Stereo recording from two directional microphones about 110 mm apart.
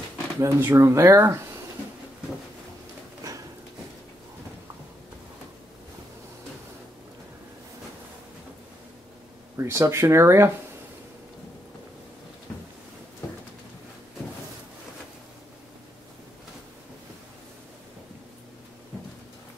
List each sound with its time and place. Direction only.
0.4 s speech: 25° right (ahead or behind)
9.6 s speech: 25° right (ahead or behind)
12.5 s a sound: 15° left (ahead or behind)